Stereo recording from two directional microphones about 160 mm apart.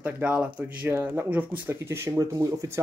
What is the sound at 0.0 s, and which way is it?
Speech, 10° right (ahead or behind).